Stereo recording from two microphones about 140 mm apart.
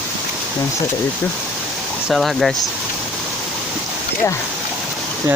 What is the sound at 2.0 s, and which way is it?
Speech, centre (ahead or behind).